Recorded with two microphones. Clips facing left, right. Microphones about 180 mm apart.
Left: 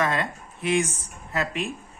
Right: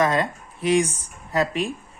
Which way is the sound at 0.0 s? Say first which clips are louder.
Right 4 dB; 35° right (ahead or behind).